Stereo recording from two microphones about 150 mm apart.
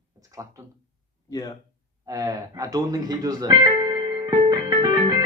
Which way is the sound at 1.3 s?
25° left (ahead or behind).